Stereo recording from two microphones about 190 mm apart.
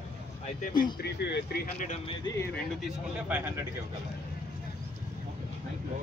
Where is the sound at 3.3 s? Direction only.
10° right (ahead or behind).